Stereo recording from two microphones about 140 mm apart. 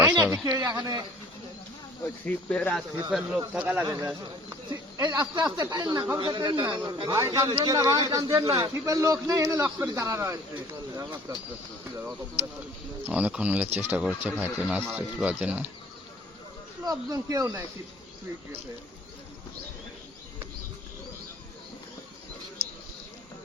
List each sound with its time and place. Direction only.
0.0 s a sound: 15° right (ahead or behind)
0.4 s a man's voice: 30° right (ahead or behind)
2.2 s speech: 10° left (ahead or behind); by 3.8 s 10° right (ahead or behind)
3.8 s a man's voice: 20° right (ahead or behind)
13.1 s speech: 10° right (ahead or behind)
16.8 s a man's voice: 25° right (ahead or behind)